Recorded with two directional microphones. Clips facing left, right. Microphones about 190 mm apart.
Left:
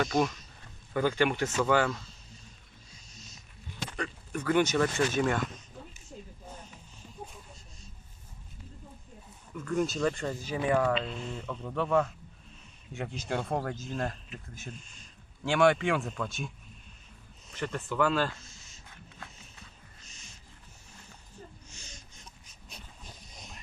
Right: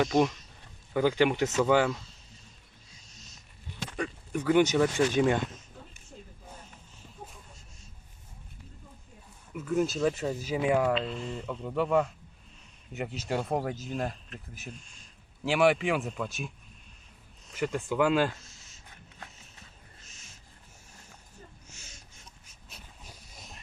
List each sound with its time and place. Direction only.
0.9 s speech: 15° right (ahead or behind)
3.9 s speech: 15° right (ahead or behind)
9.6 s speech: 5° right (ahead or behind)
10.9 s speech: centre (ahead or behind)
17.5 s speech: 10° right (ahead or behind)
18.4 s a sound: centre (ahead or behind)
20.1 s owl: centre (ahead or behind)
21.7 s a sound: 5° right (ahead or behind)